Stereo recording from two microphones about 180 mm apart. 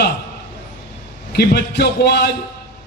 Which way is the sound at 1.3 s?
65° left (ahead or behind).